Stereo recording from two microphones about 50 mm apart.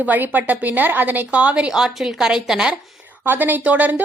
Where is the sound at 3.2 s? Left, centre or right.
Right.